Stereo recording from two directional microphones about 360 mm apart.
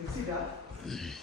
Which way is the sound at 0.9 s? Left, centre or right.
Centre.